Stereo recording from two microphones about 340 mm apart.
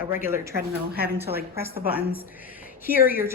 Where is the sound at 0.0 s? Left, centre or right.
Centre.